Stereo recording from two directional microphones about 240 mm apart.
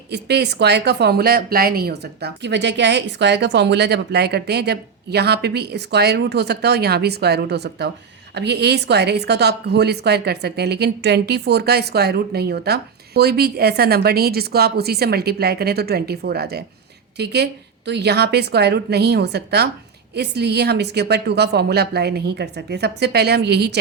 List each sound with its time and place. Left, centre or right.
0.1 s a woman's voice: right